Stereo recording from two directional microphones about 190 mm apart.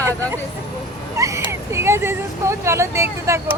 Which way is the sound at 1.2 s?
15° right (ahead or behind).